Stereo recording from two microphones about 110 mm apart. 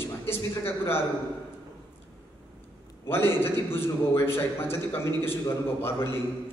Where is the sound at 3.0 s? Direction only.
20° left (ahead or behind).